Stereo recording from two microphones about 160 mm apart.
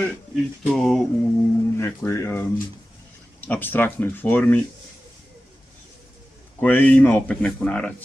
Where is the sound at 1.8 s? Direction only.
15° left (ahead or behind).